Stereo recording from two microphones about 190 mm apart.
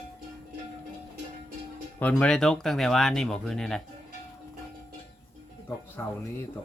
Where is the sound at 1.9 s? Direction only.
5° left (ahead or behind).